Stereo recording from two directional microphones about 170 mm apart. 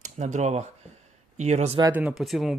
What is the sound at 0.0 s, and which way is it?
Speech, 45° right (ahead or behind).